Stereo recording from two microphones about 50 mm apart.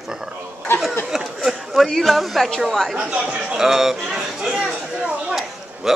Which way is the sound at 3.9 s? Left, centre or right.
Centre.